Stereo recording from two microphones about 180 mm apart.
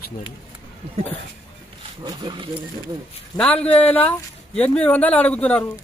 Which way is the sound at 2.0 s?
25° right (ahead or behind).